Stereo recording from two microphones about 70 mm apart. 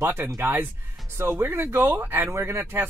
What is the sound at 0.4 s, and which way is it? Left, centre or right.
Speech, right.